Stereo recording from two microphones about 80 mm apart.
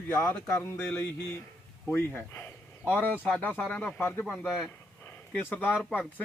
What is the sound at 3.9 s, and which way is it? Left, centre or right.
Speech, left.